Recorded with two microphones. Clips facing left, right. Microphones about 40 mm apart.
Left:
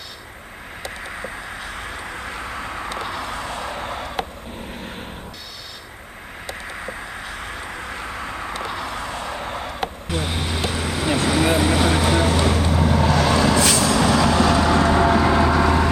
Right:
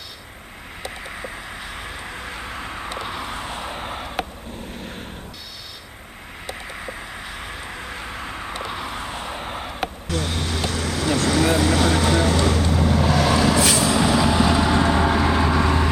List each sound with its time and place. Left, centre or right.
2.0 s vehicle: left
2.4 s vehicle: left
2.6 s vehicle: left
3.1 s vehicle: centre
3.3 s vehicle: right; by 4.0 s centre
7.7 s vehicle: left
8.0 s vehicle: left
8.7 s vehicle: centre
9.0 s vehicle: right
9.2 s a sound: centre
10.1 s vehicle: centre